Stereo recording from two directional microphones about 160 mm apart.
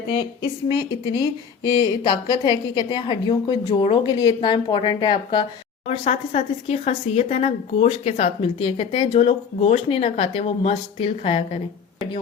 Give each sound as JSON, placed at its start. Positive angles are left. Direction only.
{"t": 0.7, "sound": "a woman's voice", "side_deg": 25}
{"t": 5.9, "sound": "speech", "side_deg": 40}